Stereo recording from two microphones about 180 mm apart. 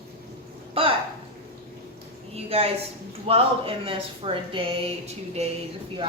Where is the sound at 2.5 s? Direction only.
35° right (ahead or behind).